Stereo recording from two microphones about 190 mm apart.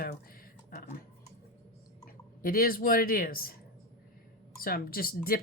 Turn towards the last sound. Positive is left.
turn(degrees=50)  # may be behind; listen again after turning